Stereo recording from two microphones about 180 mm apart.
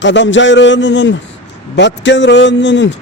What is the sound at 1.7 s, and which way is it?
A man's voice, 75° left (ahead or behind).